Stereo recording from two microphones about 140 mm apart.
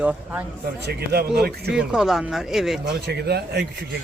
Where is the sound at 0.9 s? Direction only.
90° right.